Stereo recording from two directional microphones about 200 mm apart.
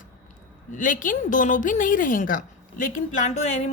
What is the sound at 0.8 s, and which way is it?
A woman's voice, 40° left (ahead or behind).